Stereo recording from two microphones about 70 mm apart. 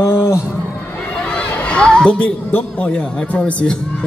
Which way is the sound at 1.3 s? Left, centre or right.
Centre.